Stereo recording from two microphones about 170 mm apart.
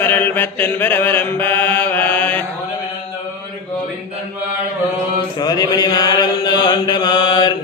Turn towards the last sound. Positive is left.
turn(degrees=25)  # may be behind; listen again after turning